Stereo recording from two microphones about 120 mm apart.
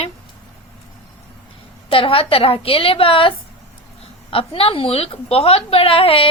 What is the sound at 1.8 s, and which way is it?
A woman's voice, 50° left (ahead or behind).